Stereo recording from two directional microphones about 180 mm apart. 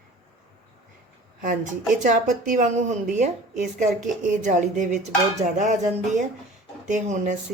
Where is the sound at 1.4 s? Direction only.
45° right (ahead or behind).